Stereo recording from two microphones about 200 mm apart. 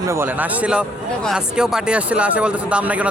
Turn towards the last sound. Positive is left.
turn(degrees=-5)  # may be behind; listen again after turning